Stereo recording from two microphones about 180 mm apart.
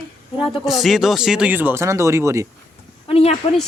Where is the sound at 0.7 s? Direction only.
Centre (ahead or behind).